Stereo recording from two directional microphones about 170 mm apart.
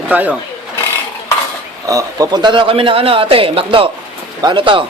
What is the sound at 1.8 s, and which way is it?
A man's voice, 20° right (ahead or behind).